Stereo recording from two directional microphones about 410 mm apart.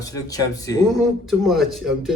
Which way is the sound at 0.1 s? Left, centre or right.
Centre.